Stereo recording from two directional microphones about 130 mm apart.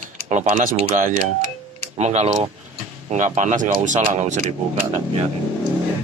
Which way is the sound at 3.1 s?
70° right (ahead or behind).